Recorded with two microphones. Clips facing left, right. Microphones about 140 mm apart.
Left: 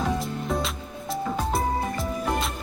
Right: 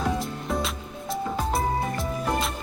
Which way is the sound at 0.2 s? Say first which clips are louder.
Left 1 dB; centre (ahead or behind).